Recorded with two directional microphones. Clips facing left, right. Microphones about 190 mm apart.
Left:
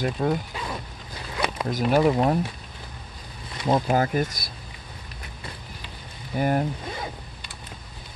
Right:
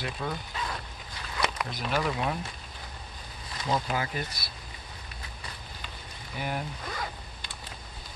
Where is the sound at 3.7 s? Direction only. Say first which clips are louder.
Left 8 dB; 45° left (ahead or behind).